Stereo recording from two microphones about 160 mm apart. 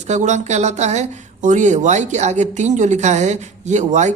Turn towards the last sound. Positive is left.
turn(degrees=-45)  # may be behind; listen again after turning